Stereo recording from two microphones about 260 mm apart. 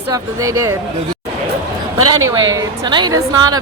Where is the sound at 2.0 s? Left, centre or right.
Right.